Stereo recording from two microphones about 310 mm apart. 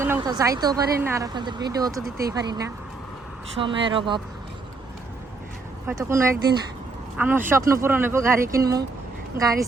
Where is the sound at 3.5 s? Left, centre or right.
Centre.